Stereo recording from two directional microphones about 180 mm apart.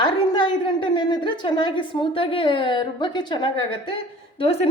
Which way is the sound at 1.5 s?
25° left (ahead or behind).